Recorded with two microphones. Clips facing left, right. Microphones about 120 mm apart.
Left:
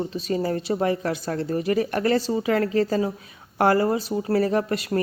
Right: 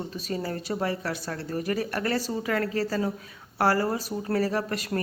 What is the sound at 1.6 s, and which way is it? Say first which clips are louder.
Speech: left 5 dB; 40° right (ahead or behind).